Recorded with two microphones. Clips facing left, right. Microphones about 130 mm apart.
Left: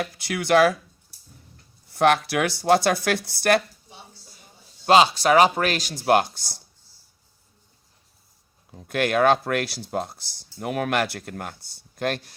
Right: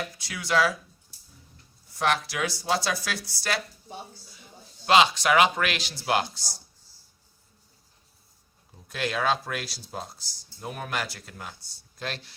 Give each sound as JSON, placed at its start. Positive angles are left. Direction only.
{"t": 0.0, "sound": "speech", "side_deg": 65}
{"t": 1.9, "sound": "speech", "side_deg": 60}
{"t": 4.3, "sound": "speech", "side_deg": 45}
{"t": 8.9, "sound": "speech", "side_deg": 60}